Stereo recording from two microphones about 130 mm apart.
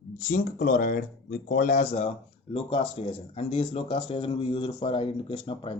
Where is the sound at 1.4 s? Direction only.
70° left (ahead or behind).